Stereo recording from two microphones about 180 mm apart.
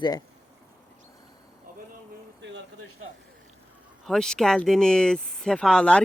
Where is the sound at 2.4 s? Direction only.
80° right.